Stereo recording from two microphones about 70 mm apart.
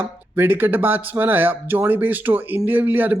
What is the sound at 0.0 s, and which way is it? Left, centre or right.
Speech, right.